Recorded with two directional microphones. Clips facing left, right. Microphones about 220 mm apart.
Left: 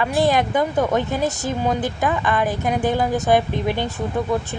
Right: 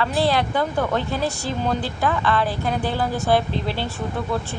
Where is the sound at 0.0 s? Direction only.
15° left (ahead or behind).